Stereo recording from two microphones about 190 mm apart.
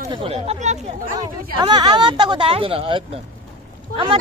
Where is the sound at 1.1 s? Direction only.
25° right (ahead or behind).